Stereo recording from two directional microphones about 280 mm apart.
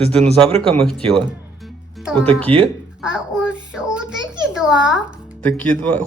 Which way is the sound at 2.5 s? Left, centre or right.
Centre.